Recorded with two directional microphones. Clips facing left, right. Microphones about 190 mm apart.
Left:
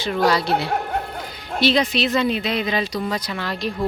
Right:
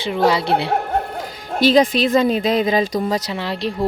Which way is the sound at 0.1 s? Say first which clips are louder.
Right 2 dB; 25° right (ahead or behind).